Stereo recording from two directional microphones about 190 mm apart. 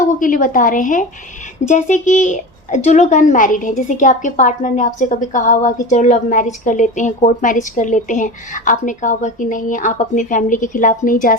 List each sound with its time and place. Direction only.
0.0 s a woman's voice: 45° left (ahead or behind)